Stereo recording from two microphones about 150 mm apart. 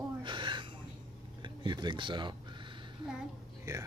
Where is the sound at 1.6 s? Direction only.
30° right (ahead or behind).